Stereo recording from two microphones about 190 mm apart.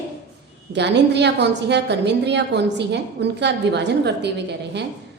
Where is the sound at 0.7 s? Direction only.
65° right (ahead or behind).